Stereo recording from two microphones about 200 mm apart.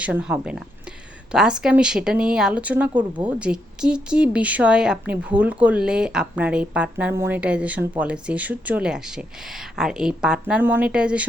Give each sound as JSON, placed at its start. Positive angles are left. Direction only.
{"t": 0.0, "sound": "speech", "side_deg": -5}